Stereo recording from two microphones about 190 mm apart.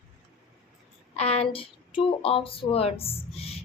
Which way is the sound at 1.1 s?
35° left (ahead or behind).